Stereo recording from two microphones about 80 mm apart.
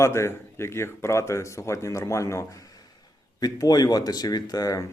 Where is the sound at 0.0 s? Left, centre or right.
Left.